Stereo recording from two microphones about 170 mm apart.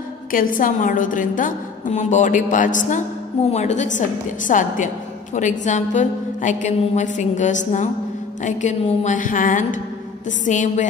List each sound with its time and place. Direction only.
0.3 s a woman's voice: 55° left (ahead or behind)